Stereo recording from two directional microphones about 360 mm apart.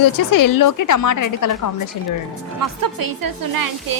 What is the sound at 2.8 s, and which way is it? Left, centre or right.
A woman's voice, right.